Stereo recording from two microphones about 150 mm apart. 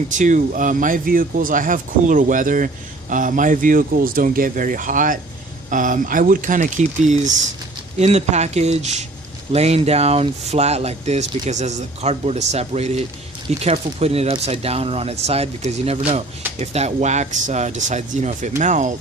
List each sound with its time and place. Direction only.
0.2 s a man's voice: 55° right (ahead or behind)